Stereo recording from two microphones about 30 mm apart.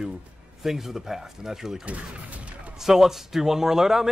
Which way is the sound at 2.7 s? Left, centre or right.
Centre.